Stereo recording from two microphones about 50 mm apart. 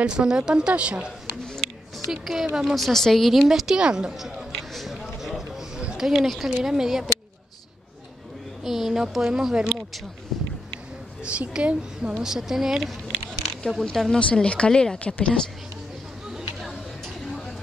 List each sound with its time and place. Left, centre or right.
0.0 s a woman's voice: centre
2.0 s a woman's voice: centre
3.4 s a woman's voice: centre
3.7 s a woman's voice: centre
4.7 s a sound: centre
5.8 s a sound: centre
6.0 s a woman's voice: centre
8.6 s a woman's voice: centre
10.3 s a sound: centre
11.2 s a woman's voice: right
12.2 s a woman's voice: centre
14.1 s speech: centre